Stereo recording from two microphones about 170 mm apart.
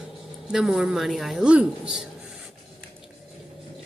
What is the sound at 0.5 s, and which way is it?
Speech, 5° right (ahead or behind).